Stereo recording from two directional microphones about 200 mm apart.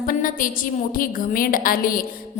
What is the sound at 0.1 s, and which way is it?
Speech, 45° left (ahead or behind).